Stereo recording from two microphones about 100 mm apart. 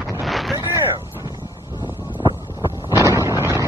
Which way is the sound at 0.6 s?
30° right (ahead or behind).